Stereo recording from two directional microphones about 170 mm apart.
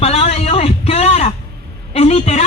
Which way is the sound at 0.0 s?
40° left (ahead or behind).